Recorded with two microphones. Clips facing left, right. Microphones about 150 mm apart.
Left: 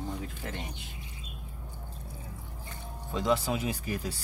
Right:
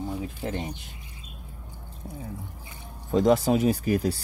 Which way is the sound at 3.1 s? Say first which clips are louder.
Right 8 dB; 45° right (ahead or behind).